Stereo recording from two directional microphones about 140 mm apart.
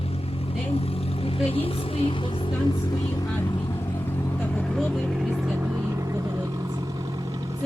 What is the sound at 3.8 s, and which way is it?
Vehicle, 15° left (ahead or behind).